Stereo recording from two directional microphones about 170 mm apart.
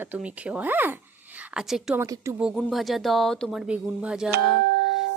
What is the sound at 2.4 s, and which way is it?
Speech, 5° right (ahead or behind).